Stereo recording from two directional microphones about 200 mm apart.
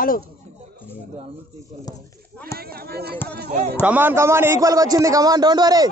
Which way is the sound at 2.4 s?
50° right (ahead or behind).